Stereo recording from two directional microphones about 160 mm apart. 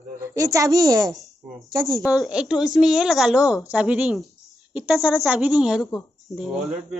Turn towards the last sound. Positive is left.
turn(degrees=0)  # may be behind; listen again after turning